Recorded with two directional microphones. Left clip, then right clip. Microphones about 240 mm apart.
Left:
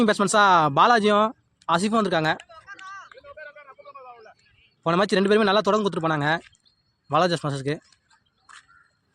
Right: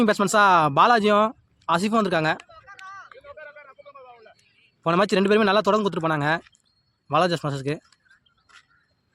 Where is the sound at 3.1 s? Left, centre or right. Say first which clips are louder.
Even; centre.